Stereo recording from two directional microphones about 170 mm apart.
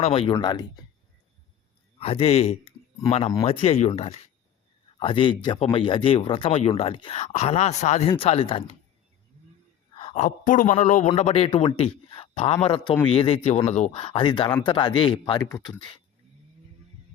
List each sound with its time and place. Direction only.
0.0 s a man's voice: 35° left (ahead or behind)
2.0 s speech: 35° left (ahead or behind)
9.9 s a sound: 35° left (ahead or behind)
10.2 s a man's voice: 50° left (ahead or behind); by 15.7 s 20° left (ahead or behind)